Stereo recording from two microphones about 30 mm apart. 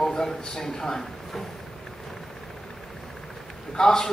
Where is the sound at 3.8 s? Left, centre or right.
Centre.